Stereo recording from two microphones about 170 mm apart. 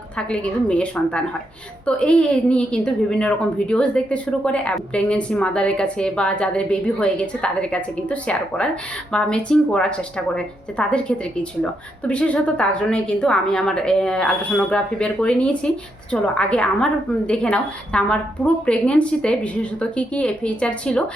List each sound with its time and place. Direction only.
0.2 s a woman's voice: 5° left (ahead or behind)